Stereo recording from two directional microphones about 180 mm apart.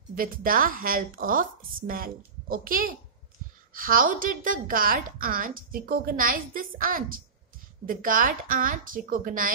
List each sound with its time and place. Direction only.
0.1 s a woman's voice: 50° right (ahead or behind)